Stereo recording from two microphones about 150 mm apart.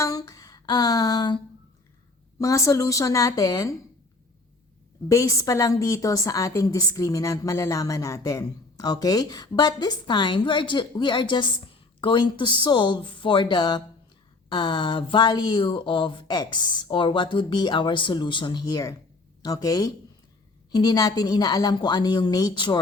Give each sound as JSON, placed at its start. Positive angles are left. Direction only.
{"t": 0.0, "sound": "a sound", "side_deg": 25}
{"t": 2.4, "sound": "a woman's voice", "side_deg": 20}
{"t": 5.0, "sound": "a woman's voice", "side_deg": 20}